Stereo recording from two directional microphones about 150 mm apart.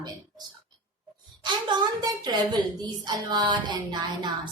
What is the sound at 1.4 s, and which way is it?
A woman's voice, 30° right (ahead or behind).